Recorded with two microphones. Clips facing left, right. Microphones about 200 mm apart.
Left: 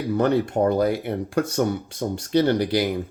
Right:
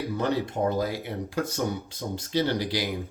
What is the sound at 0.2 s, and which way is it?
Speech, 60° left (ahead or behind).